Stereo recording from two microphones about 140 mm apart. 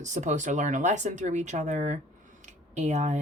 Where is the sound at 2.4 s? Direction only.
60° right (ahead or behind).